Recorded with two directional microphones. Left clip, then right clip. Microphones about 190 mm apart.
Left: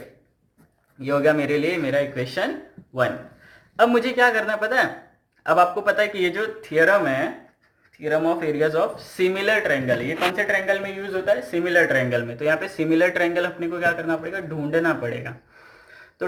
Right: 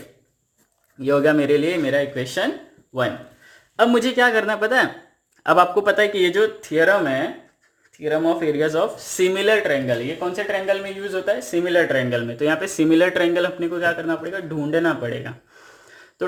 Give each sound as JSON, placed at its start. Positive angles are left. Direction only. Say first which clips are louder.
{"t": 1.0, "sound": "speech", "louder": "right 3 dB", "side_deg": -40}
{"t": 3.9, "sound": "speech", "louder": "right 1 dB", "side_deg": -50}
{"t": 6.7, "sound": "speech", "louder": "even", "side_deg": -30}
{"t": 8.6, "sound": "speech", "louder": "right 1 dB", "side_deg": -50}
{"t": 9.6, "sound": "speech", "louder": "right 1 dB", "side_deg": -30}
{"t": 14.7, "sound": "speech", "louder": "right 1 dB", "side_deg": -30}